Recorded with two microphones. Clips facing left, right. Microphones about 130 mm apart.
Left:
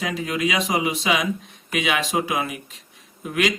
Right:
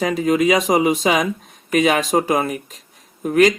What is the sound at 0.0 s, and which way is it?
Speech, 45° right (ahead or behind).